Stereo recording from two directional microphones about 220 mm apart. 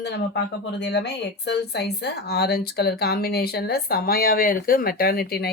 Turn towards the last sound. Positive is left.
turn(degrees=45)  # may be behind; listen again after turning